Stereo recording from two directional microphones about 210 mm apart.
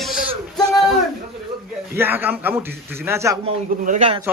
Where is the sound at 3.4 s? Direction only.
35° right (ahead or behind).